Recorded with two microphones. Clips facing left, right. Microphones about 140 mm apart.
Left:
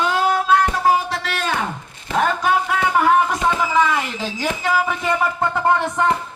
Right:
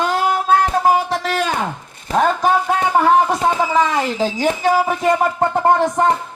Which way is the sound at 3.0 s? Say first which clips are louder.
Right 2 dB; 35° right (ahead or behind).